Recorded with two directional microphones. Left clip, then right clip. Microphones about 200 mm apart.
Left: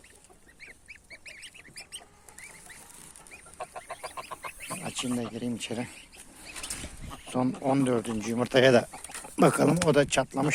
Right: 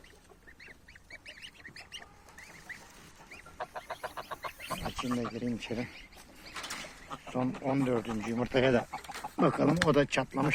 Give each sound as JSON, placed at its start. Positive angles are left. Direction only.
{"t": 3.6, "sound": "chicken", "side_deg": 10}
{"t": 4.3, "sound": "chicken", "side_deg": 20}
{"t": 5.4, "sound": "speech", "side_deg": 20}
{"t": 7.3, "sound": "speech", "side_deg": 40}